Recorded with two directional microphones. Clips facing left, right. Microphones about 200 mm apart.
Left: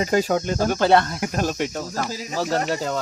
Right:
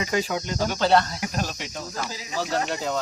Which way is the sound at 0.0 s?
40° left (ahead or behind).